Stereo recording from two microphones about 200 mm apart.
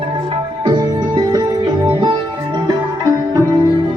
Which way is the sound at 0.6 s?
20° right (ahead or behind).